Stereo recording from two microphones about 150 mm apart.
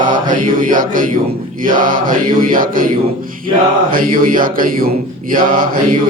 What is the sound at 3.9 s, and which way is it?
Mantra, 70° right (ahead or behind).